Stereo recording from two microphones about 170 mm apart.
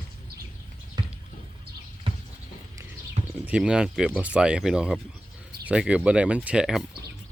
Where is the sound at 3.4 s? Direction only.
5° right (ahead or behind).